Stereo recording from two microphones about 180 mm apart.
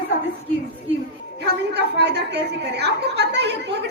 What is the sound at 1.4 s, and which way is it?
A woman's voice, 65° right (ahead or behind).